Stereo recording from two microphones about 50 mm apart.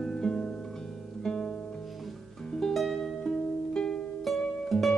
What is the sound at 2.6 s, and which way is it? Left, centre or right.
Music, centre.